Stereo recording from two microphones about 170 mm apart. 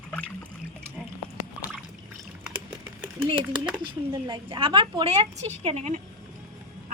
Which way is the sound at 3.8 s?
30° right (ahead or behind).